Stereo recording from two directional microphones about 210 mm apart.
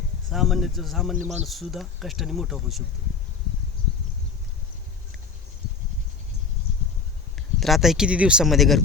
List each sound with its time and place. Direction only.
0.3 s speech: centre (ahead or behind)
1.1 s speech: 35° right (ahead or behind)
1.5 s speech: centre (ahead or behind)
7.3 s speech: centre (ahead or behind)